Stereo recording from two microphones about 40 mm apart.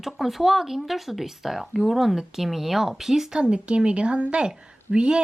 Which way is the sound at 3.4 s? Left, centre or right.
Right.